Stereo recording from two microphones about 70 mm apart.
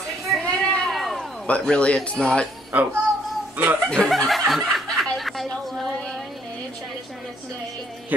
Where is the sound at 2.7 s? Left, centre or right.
Right.